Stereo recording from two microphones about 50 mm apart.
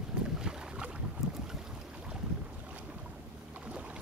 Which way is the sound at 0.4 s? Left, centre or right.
Centre.